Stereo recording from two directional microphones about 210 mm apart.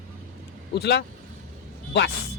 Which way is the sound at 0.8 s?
50° left (ahead or behind).